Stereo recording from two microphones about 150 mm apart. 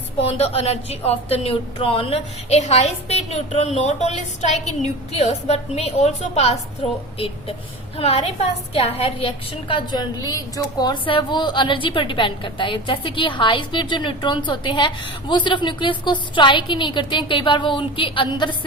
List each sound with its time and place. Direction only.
0.2 s speech: 40° left (ahead or behind)
7.9 s a woman's voice: 40° left (ahead or behind)